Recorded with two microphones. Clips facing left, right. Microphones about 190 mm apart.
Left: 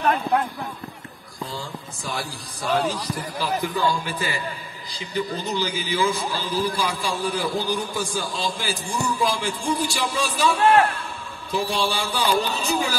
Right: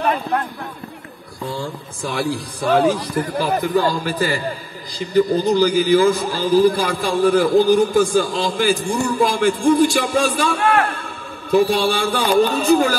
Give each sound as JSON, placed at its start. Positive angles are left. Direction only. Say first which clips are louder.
{"t": 2.0, "sound": "a man's voice", "louder": "right 10 dB", "side_deg": -55}
{"t": 3.8, "sound": "a man's voice", "louder": "right 5 dB", "side_deg": -40}